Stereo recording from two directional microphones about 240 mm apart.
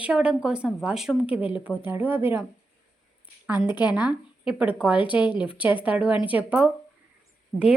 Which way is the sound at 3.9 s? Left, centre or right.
Centre.